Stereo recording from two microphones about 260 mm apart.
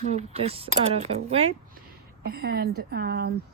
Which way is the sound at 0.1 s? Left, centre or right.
Right.